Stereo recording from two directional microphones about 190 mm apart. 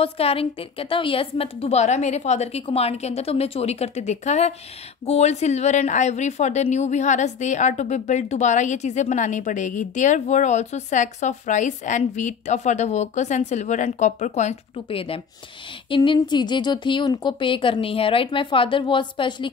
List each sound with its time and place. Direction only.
0.0 s a woman's voice: 30° left (ahead or behind)